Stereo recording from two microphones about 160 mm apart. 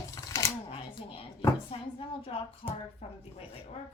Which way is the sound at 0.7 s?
35° left (ahead or behind).